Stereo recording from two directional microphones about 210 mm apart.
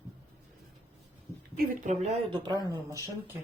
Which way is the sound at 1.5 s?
35° right (ahead or behind).